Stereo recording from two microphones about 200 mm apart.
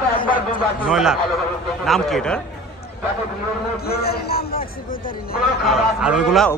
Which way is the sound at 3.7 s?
50° left (ahead or behind).